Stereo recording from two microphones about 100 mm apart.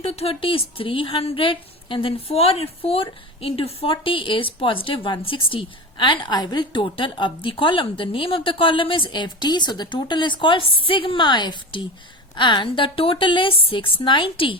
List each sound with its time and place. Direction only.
0.0 s speech: 90° left; by 3.9 s 70° left (ahead or behind)
4.0 s a woman's voice: 60° left (ahead or behind)